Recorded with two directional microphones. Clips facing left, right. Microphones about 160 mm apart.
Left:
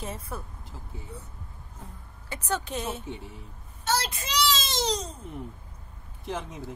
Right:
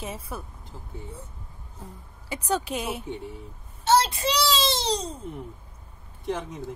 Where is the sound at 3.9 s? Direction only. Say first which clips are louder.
Right 8 dB; 30° right (ahead or behind).